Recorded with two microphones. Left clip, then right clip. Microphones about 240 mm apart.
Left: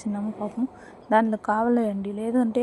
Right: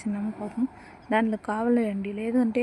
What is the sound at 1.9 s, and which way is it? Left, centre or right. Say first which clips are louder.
Speech: left 2 dB; left.